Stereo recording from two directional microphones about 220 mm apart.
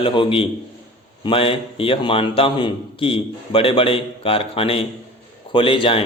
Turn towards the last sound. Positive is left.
turn(degrees=25)  # may be behind; listen again after turning